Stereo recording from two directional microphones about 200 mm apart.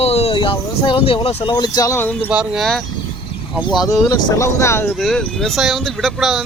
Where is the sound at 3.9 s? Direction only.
15° left (ahead or behind).